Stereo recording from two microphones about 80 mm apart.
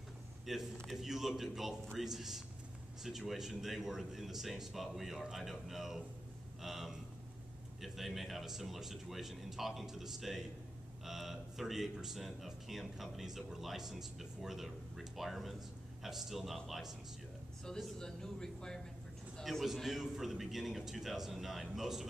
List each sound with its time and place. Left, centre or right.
0.5 s speech: centre
17.9 s speech: centre
19.3 s a sound: centre
19.6 s speech: centre